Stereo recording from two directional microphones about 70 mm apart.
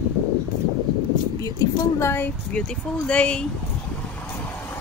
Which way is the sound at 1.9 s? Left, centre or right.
Left.